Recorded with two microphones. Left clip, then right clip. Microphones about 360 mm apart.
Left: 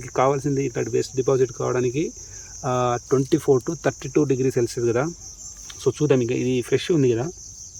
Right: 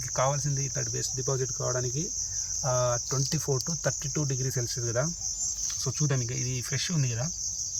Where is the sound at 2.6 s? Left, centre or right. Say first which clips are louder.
Left 7 dB; left.